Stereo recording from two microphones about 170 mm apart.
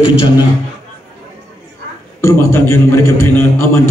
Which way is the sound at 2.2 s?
15° left (ahead or behind).